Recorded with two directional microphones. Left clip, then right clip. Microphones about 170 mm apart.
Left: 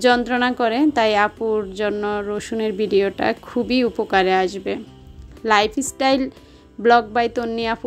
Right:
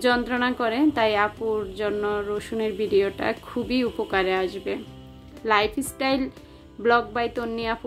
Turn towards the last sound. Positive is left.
turn(degrees=40)  # may be behind; listen again after turning